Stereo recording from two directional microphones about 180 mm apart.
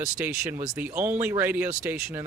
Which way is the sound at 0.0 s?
15° right (ahead or behind).